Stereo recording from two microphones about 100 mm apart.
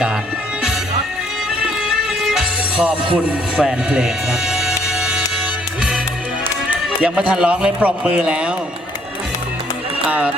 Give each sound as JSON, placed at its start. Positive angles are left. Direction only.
{"t": 2.2, "sound": "music", "side_deg": -5}
{"t": 6.7, "sound": "a man's voice", "side_deg": -10}
{"t": 10.1, "sound": "speech", "side_deg": -15}